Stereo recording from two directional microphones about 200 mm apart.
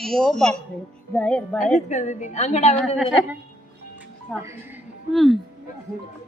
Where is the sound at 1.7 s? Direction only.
35° left (ahead or behind).